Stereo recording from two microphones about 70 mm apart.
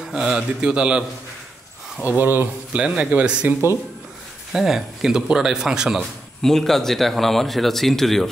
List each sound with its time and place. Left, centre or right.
0.0 s speech: centre
2.0 s speech: right
2.7 s speech: centre
4.5 s speech: centre
6.4 s speech: centre